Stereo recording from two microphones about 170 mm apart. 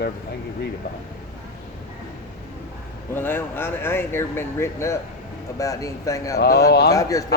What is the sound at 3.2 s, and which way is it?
Speech, 15° left (ahead or behind).